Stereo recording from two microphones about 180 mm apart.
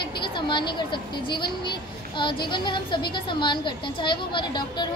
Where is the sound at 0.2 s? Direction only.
25° left (ahead or behind).